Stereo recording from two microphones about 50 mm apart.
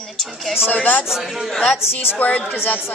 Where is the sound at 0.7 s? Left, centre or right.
Left.